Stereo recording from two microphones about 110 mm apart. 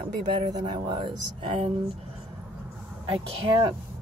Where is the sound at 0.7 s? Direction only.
40° right (ahead or behind).